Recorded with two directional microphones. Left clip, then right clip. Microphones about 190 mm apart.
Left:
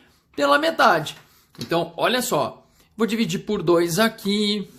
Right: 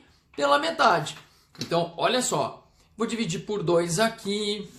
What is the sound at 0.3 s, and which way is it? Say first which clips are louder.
Speech: left 4 dB; 40° left (ahead or behind).